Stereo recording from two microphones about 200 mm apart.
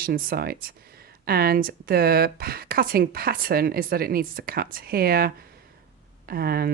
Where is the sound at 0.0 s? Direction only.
45° right (ahead or behind).